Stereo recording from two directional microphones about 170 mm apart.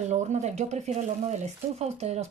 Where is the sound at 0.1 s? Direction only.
40° right (ahead or behind).